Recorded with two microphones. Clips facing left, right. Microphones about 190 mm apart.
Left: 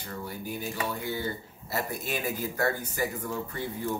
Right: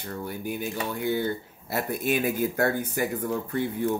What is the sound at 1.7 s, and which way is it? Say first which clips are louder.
Speech: right 6 dB; 55° right (ahead or behind).